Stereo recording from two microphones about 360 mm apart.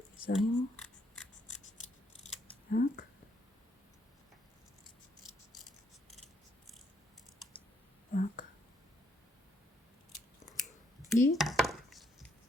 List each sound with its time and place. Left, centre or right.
0.3 s a sound: centre
2.6 s a sound: left
5.5 s scissors: centre
8.1 s whispering: left
10.4 s scissors: centre
11.1 s chopping: centre